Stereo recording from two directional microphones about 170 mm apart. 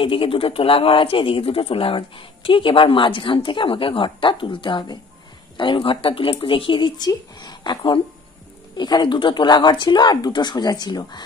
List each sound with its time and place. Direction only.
0.0 s speech: 30° left (ahead or behind)